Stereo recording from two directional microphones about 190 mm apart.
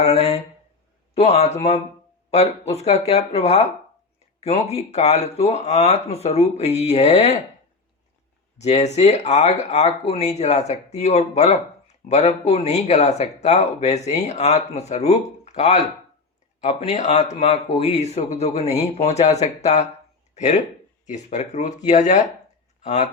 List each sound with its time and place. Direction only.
0.0 s speech: 35° left (ahead or behind)
8.5 s speech: 35° left (ahead or behind)